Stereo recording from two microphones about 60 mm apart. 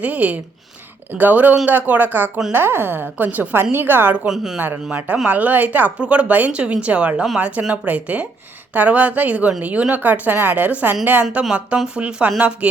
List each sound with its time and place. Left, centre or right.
0.0 s a woman's voice: right
4.3 s speech: centre
5.2 s speech: right